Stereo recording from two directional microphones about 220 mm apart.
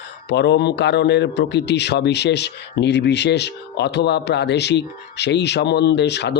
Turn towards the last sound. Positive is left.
turn(degrees=50)  # may be behind; listen again after turning